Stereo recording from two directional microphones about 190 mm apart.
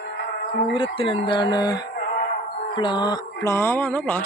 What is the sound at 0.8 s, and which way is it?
Speech, 30° left (ahead or behind).